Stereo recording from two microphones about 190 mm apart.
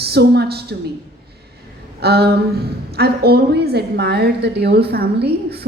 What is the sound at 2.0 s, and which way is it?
A woman's voice, 55° right (ahead or behind).